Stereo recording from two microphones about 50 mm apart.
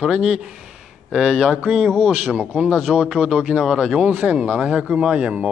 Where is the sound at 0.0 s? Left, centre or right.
Centre.